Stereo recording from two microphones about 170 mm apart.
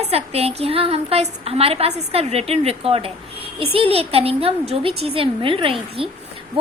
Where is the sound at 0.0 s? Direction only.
35° right (ahead or behind).